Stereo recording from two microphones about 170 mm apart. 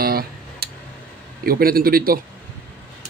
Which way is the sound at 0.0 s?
60° right (ahead or behind).